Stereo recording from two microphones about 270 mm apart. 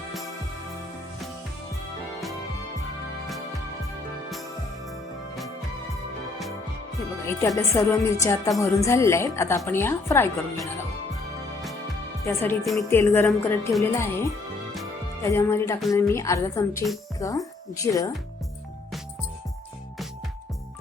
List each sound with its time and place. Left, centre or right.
7.3 s speech: centre
12.2 s speech: centre